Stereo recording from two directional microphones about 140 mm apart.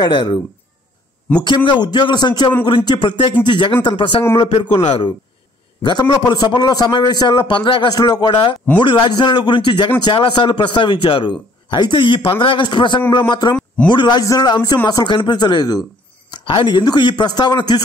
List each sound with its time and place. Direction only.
0.0 s a man's voice: 35° left (ahead or behind)
1.4 s a man's voice: 35° left (ahead or behind)